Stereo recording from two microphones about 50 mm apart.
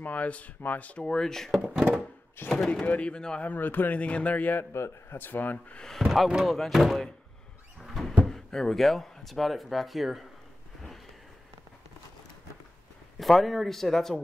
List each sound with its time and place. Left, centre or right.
0.0 s speech: left
1.0 s speech: centre
2.4 s speech: left
2.7 s speech: left
3.4 s speech: left
4.0 s speech: left
5.8 s speech: centre
6.0 s a man's voice: centre
7.8 s cupboard open or close: centre
8.2 s speech: centre
13.2 s a man's voice: centre